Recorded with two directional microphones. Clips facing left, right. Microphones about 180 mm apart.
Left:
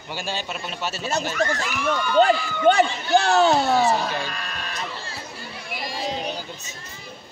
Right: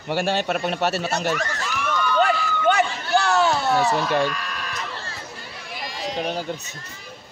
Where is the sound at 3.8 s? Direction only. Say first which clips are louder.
Right 1 dB; 65° right (ahead or behind).